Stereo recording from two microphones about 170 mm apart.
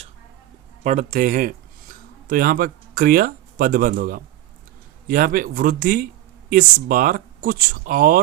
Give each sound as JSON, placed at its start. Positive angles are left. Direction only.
{"t": 0.9, "sound": "speech", "side_deg": -50}